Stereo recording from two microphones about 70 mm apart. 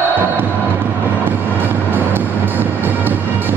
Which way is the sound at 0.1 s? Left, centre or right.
Right.